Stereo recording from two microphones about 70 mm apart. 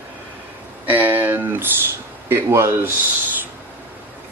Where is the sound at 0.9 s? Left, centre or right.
Right.